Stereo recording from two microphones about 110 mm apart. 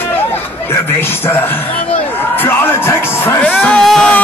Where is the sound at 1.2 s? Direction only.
20° left (ahead or behind).